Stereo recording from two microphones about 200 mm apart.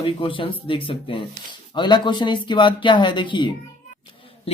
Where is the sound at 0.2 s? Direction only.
25° left (ahead or behind).